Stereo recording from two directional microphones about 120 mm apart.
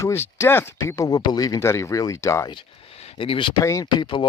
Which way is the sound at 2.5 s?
50° left (ahead or behind).